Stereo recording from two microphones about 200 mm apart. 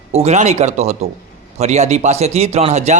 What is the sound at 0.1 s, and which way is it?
A man's voice, 30° right (ahead or behind).